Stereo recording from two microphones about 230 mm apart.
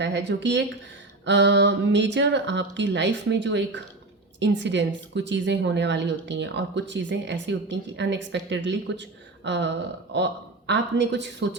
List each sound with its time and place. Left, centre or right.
0.0 s a woman's voice: right
10.7 s a woman's voice: right